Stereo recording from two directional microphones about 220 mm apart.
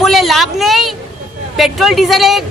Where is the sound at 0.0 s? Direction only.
Centre (ahead or behind).